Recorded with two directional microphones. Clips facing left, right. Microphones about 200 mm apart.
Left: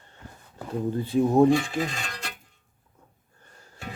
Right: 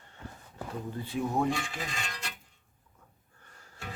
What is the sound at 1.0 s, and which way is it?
Speech, 35° left (ahead or behind).